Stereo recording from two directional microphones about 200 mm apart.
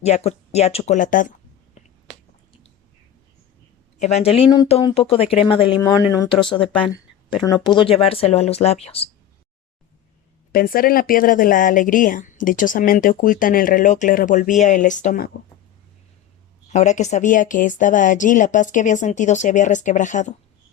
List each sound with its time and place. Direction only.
0.0 s speech: 35° left (ahead or behind)
4.0 s speech: 35° left (ahead or behind)
10.5 s speech: 45° left (ahead or behind)
16.7 s speech: 35° left (ahead or behind)